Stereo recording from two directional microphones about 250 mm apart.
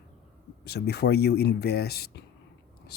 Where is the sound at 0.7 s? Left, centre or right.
Left.